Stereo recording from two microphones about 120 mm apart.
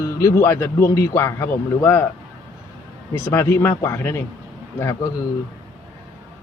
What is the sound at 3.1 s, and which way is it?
Speech, 20° left (ahead or behind).